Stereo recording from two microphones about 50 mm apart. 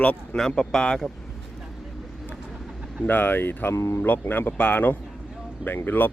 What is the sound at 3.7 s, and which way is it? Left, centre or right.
Speech, left.